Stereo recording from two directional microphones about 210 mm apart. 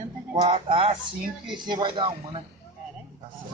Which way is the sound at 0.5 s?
25° right (ahead or behind).